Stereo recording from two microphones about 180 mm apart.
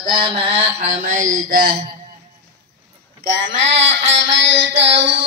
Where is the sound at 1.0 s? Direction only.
45° right (ahead or behind).